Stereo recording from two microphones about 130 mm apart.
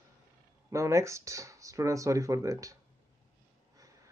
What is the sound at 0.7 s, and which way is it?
Speech, 25° right (ahead or behind).